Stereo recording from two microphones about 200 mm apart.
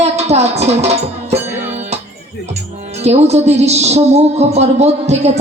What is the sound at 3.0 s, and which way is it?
A woman's voice, 30° right (ahead or behind).